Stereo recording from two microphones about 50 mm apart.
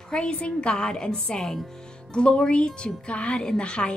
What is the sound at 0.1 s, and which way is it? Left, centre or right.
A woman's voice, left.